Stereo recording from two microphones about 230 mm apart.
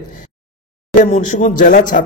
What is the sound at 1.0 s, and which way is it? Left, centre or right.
Speech, left.